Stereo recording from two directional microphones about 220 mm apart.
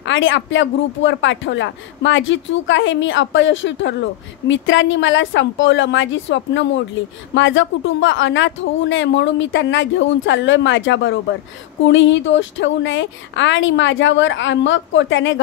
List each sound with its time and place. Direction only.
0.0 s speech: 60° left (ahead or behind)